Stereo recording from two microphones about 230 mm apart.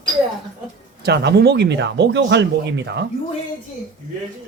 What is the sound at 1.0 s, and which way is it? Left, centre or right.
Speech, right.